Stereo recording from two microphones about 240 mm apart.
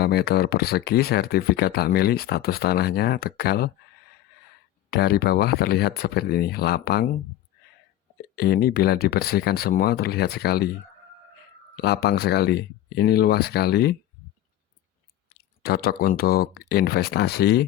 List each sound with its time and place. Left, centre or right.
0.0 s speech: left
4.9 s speech: left
8.4 s speech: left
11.8 s speech: left
15.6 s speech: left